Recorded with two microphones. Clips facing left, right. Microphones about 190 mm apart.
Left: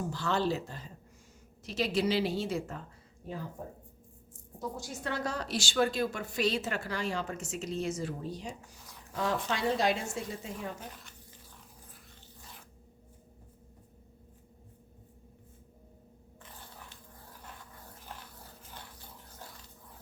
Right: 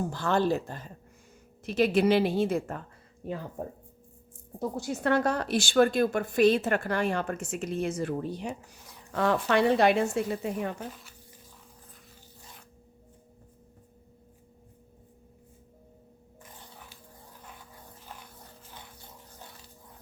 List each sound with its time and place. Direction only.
0.1 s a woman's voice: 50° right (ahead or behind)
4.8 s a woman's voice: 60° right (ahead or behind)